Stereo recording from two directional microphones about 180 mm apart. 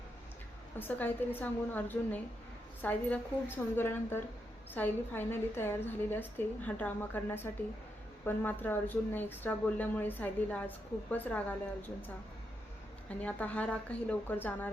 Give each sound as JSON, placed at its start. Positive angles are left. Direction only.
{"t": 0.8, "sound": "speech", "side_deg": 10}